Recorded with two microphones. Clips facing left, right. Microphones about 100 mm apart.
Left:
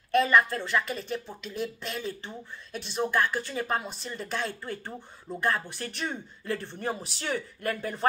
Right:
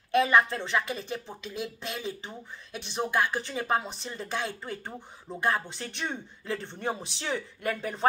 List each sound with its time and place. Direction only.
0.1 s speech: 15° right (ahead or behind)